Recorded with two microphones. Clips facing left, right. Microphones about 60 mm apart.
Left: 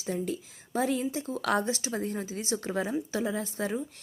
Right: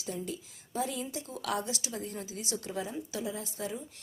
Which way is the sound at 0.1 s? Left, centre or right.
Left.